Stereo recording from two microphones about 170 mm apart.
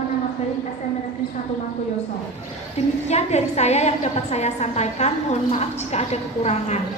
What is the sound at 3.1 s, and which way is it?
A woman's voice, 40° left (ahead or behind).